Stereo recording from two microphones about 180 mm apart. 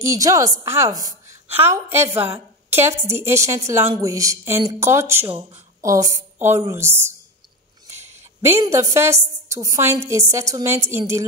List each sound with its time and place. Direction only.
0.0 s a woman's voice: 15° right (ahead or behind)